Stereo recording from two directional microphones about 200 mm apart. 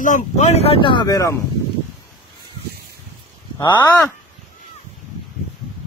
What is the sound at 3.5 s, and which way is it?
Speech, 20° left (ahead or behind).